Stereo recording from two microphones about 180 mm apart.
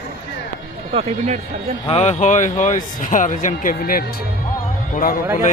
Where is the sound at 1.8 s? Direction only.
35° left (ahead or behind).